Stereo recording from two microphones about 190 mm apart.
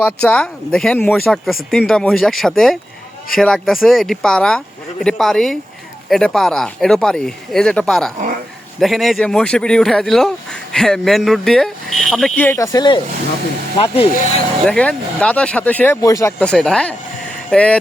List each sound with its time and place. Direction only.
0.0 s speech: 5° left (ahead or behind); by 14.1 s 30° left (ahead or behind)
14.6 s speech: 5° left (ahead or behind)
16.4 s speech: 5° left (ahead or behind)